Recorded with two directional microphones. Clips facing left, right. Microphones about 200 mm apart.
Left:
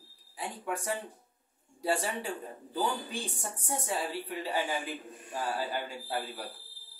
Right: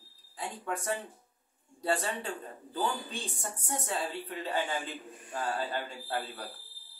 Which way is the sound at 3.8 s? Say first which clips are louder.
Left 1 dB; 10° left (ahead or behind).